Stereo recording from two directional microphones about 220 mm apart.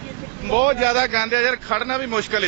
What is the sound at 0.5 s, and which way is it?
Speech, 15° right (ahead or behind).